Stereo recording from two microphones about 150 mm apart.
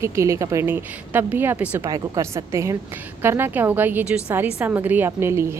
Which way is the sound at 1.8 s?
25° right (ahead or behind).